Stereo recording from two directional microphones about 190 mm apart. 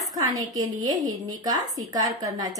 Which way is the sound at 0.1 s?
20° right (ahead or behind).